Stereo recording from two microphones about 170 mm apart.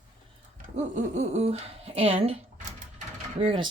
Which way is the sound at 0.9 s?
45° right (ahead or behind).